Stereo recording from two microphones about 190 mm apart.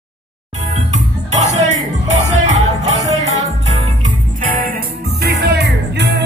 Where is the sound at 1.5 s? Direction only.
35° right (ahead or behind).